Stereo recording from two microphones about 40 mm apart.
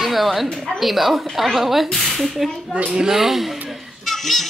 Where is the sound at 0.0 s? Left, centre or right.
Centre.